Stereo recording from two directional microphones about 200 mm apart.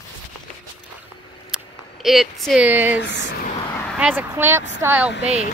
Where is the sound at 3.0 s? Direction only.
60° left (ahead or behind).